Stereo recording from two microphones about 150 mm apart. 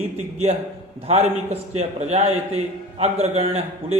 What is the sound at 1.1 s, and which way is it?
A man's voice, 45° right (ahead or behind).